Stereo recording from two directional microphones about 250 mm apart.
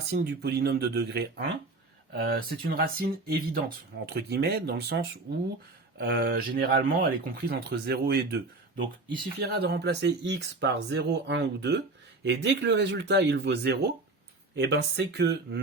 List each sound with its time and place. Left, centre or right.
0.1 s speech: right